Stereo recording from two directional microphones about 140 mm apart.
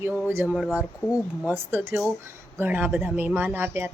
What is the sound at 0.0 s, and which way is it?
Speech, 10° right (ahead or behind).